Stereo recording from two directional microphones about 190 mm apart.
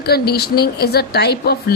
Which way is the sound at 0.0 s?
55° left (ahead or behind).